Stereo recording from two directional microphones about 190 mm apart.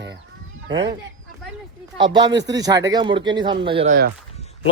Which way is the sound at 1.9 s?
25° right (ahead or behind).